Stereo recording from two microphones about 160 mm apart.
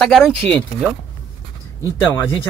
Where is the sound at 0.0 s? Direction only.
5° left (ahead or behind).